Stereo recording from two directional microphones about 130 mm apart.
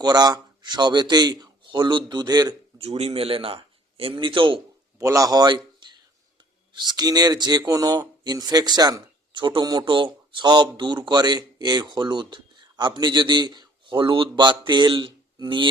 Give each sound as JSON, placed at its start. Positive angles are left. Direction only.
{"t": 0.0, "sound": "speech", "side_deg": -30}
{"t": 2.7, "sound": "speech", "side_deg": -50}
{"t": 4.9, "sound": "a man's voice", "side_deg": -25}
{"t": 6.7, "sound": "speech", "side_deg": -30}